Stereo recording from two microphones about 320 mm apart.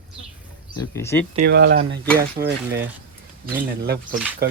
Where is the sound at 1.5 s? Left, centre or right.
Right.